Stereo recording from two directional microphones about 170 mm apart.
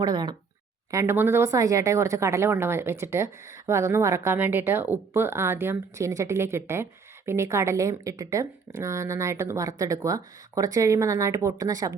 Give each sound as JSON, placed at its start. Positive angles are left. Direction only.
{"t": 0.0, "sound": "a woman's voice", "side_deg": -25}